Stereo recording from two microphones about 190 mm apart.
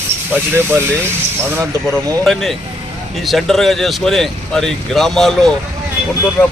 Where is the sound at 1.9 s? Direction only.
Centre (ahead or behind).